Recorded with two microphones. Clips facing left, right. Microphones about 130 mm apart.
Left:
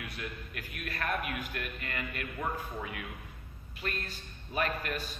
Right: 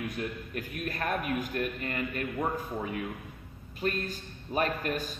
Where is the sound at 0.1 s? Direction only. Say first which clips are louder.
Right 7 dB; 40° right (ahead or behind).